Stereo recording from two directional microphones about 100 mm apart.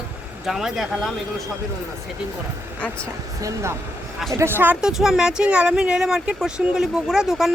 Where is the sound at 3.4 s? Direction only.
35° right (ahead or behind).